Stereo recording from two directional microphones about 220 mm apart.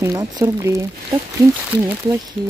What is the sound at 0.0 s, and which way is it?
Speech, 15° right (ahead or behind).